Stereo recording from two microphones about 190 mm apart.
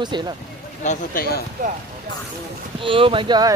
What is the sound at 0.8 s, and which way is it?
Speech, 45° left (ahead or behind).